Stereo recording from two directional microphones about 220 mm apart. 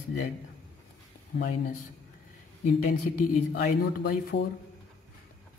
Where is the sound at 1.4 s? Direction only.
35° left (ahead or behind).